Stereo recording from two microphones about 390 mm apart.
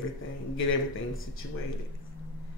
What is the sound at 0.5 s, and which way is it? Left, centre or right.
Speech, left.